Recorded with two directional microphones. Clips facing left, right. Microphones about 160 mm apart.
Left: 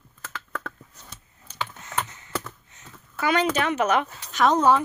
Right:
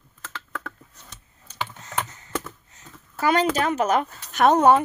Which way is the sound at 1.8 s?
35° right (ahead or behind).